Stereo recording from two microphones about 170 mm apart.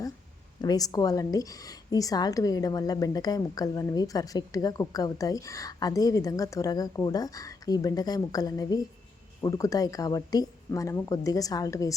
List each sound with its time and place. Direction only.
0.6 s a woman's voice: 20° left (ahead or behind)